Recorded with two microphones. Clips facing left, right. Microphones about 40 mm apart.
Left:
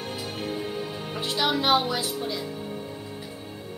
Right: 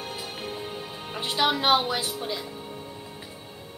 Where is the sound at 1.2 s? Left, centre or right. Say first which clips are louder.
Right 1 dB; centre.